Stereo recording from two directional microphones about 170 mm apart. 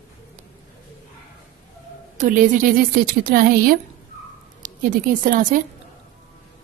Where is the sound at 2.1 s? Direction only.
50° right (ahead or behind).